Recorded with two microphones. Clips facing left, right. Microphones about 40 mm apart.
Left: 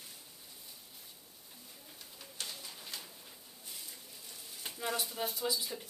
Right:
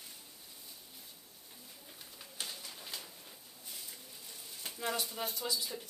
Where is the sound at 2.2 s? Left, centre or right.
Centre.